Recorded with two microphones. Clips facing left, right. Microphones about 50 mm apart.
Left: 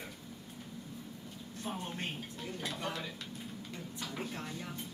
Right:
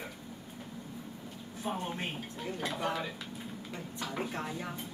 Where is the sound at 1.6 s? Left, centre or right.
Centre.